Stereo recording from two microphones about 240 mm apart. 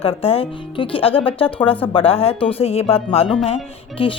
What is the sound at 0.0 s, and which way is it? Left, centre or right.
Speech, left.